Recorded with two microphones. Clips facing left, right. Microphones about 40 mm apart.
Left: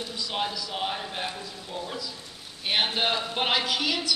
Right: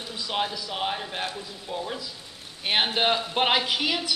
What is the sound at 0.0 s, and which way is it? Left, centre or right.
A man's voice, centre.